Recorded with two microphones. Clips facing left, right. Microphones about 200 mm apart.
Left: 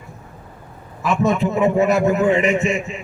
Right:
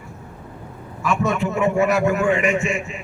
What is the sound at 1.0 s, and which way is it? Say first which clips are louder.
A man's voice: left 3 dB; 20° left (ahead or behind).